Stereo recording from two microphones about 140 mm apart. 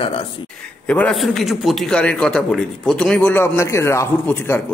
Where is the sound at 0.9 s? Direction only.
10° left (ahead or behind).